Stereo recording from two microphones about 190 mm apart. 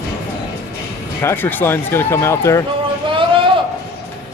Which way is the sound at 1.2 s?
10° left (ahead or behind).